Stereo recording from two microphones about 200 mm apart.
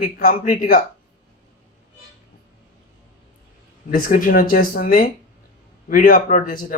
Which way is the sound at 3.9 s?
45° left (ahead or behind).